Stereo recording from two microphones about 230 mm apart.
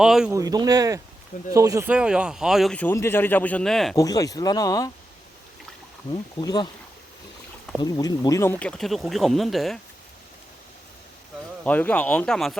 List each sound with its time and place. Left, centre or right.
0.0 s a man's voice: centre
0.3 s a man's voice: centre
3.9 s speech: centre
6.4 s speech: centre
7.8 s a man's voice: centre
11.6 s speech: centre